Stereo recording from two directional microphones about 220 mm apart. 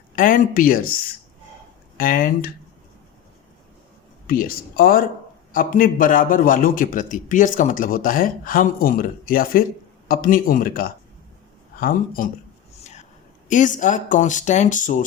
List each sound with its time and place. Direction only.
0.2 s a man's voice: 40° left (ahead or behind)
2.0 s a man's voice: 40° left (ahead or behind)
4.3 s a man's voice: 40° left (ahead or behind)
13.5 s a man's voice: 35° left (ahead or behind)